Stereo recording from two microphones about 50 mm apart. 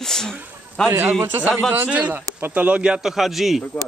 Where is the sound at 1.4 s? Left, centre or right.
Right.